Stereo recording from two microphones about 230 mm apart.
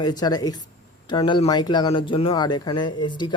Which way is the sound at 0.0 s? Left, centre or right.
Centre.